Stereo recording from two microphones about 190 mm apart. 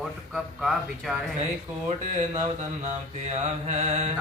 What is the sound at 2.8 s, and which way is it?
Mantra, 35° right (ahead or behind).